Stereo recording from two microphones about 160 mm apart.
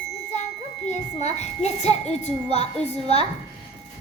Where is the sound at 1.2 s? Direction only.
45° left (ahead or behind).